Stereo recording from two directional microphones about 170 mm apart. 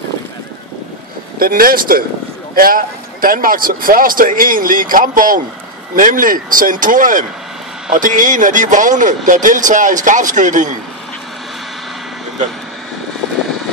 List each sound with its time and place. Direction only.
1.4 s speech: 60° right (ahead or behind)